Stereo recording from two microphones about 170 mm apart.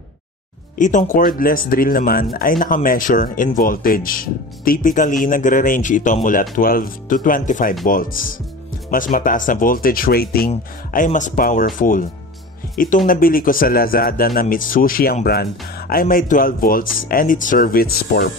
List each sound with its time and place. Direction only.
0.7 s speech: 45° left (ahead or behind); by 10.5 s 65° left (ahead or behind)
10.9 s speech: 50° left (ahead or behind); by 18.3 s 70° left (ahead or behind)